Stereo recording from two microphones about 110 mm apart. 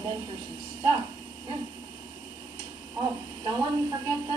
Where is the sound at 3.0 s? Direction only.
40° right (ahead or behind).